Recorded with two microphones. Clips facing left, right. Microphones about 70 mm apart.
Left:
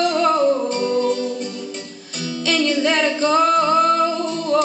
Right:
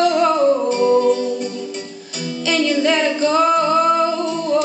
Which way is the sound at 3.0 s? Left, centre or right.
Centre.